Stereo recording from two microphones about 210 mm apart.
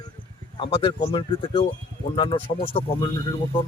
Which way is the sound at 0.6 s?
25° left (ahead or behind).